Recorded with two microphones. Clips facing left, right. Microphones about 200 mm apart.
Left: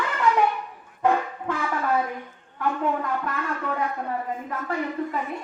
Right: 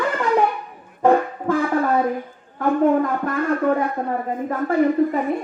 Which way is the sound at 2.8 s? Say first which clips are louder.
Right 11 dB; 45° right (ahead or behind).